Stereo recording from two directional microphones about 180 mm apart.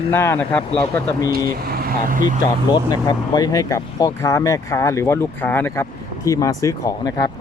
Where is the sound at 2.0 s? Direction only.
50° right (ahead or behind).